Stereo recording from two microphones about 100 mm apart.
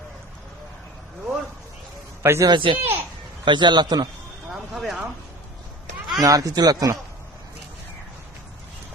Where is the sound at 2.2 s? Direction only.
25° right (ahead or behind).